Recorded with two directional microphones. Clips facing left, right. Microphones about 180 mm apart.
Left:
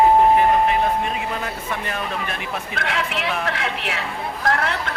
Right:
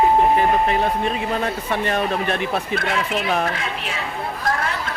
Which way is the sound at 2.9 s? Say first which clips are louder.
Right 1 dB; 70° left (ahead or behind).